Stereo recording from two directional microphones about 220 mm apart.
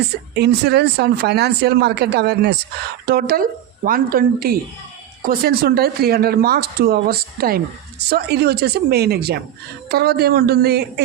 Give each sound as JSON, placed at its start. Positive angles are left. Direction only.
{"t": 0.3, "sound": "speech", "side_deg": -50}